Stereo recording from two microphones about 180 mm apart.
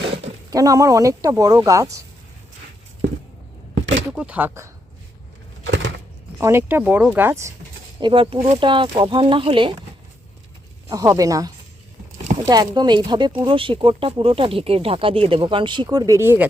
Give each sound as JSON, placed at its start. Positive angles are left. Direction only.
{"t": 0.5, "sound": "speech", "side_deg": -20}
{"t": 3.8, "sound": "a sound", "side_deg": -90}
{"t": 4.1, "sound": "speech", "side_deg": -5}
{"t": 6.4, "sound": "speech", "side_deg": -15}
{"t": 8.0, "sound": "speech", "side_deg": -30}
{"t": 10.8, "sound": "speech", "side_deg": -20}